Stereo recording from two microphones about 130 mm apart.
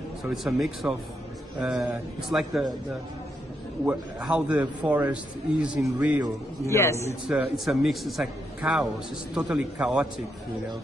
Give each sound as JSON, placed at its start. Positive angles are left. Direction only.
{"t": 0.3, "sound": "a man's voice", "side_deg": 0}
{"t": 6.7, "sound": "a man's voice", "side_deg": 20}
{"t": 7.2, "sound": "a man's voice", "side_deg": -5}